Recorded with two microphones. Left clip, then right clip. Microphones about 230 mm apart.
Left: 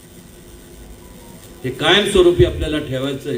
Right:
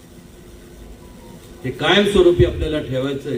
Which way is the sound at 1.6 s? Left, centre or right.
Left.